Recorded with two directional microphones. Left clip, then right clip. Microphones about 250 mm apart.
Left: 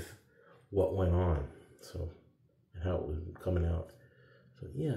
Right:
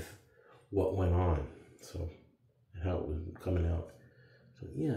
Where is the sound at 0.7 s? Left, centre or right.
Centre.